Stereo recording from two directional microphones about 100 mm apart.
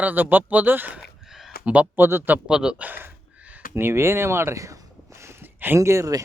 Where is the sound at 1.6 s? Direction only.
15° right (ahead or behind).